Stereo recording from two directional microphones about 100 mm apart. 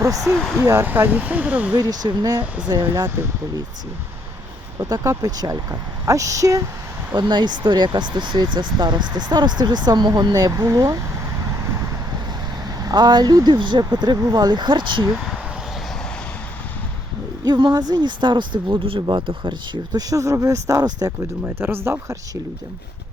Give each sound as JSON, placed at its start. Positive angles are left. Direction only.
{"t": 0.0, "sound": "speech", "side_deg": -35}
{"t": 0.6, "sound": "speech", "side_deg": -25}
{"t": 1.7, "sound": "speech", "side_deg": -45}
{"t": 4.8, "sound": "speech", "side_deg": -35}
{"t": 7.2, "sound": "speech", "side_deg": -45}
{"t": 12.8, "sound": "speech", "side_deg": -45}
{"t": 17.4, "sound": "speech", "side_deg": -45}
{"t": 21.4, "sound": "speech", "side_deg": -20}